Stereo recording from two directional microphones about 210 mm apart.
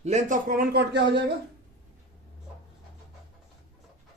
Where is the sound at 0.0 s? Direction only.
35° right (ahead or behind); by 1.2 s 55° right (ahead or behind).